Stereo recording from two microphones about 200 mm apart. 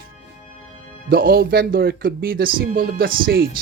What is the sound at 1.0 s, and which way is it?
Speech, 45° right (ahead or behind).